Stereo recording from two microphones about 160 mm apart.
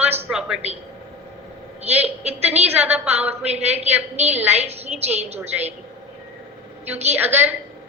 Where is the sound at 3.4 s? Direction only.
40° right (ahead or behind).